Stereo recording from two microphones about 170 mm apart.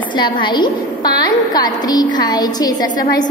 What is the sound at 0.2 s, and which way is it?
A woman's voice, 25° left (ahead or behind).